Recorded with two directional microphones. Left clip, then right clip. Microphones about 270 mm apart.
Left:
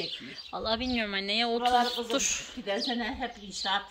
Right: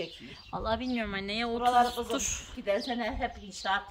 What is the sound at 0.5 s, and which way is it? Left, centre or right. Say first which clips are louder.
Speech: left 1 dB; centre.